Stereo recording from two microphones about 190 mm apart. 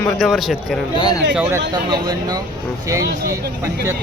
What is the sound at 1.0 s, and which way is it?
Speech, 20° left (ahead or behind).